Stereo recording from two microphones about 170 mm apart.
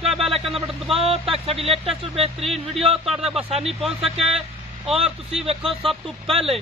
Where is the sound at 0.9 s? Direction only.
35° right (ahead or behind).